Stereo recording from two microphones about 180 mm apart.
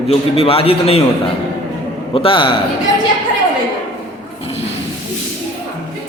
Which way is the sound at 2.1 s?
30° left (ahead or behind).